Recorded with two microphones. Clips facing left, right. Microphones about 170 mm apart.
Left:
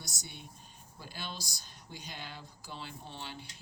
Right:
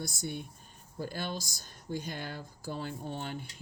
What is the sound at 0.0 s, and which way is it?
Speech, 55° right (ahead or behind).